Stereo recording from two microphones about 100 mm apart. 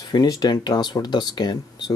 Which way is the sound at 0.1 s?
45° left (ahead or behind).